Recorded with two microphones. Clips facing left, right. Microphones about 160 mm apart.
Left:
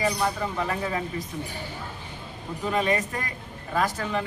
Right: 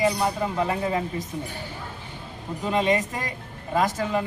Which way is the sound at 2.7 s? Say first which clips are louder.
Right 3 dB; 20° right (ahead or behind).